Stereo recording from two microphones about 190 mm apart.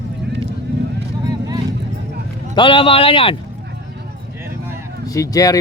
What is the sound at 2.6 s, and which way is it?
Speech, 25° left (ahead or behind).